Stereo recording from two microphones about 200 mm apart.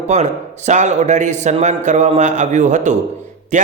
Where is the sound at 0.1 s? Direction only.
35° right (ahead or behind).